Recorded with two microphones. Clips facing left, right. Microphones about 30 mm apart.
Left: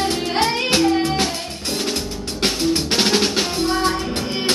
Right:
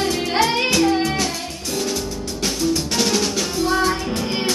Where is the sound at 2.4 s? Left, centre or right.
Left.